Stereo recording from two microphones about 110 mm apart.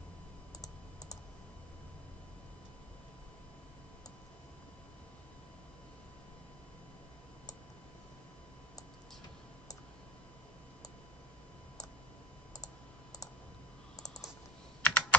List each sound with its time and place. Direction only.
13.9 s typing: 90° left
14.8 s computer keyboard: 15° left (ahead or behind)